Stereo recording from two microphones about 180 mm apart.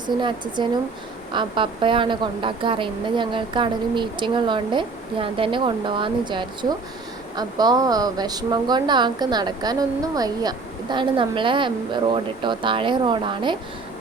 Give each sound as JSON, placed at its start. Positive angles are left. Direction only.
{"t": 0.2, "sound": "a woman's voice", "side_deg": -25}